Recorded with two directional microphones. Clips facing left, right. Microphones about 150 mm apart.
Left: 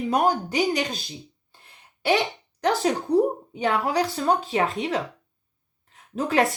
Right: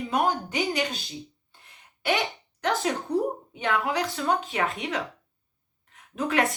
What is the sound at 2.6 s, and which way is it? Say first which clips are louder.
A woman's voice: left 4 dB; 35° left (ahead or behind).